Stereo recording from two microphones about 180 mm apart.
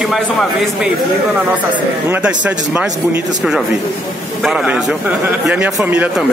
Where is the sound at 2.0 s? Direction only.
10° right (ahead or behind).